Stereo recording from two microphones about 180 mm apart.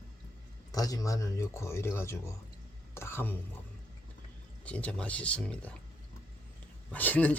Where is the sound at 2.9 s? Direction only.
15° left (ahead or behind).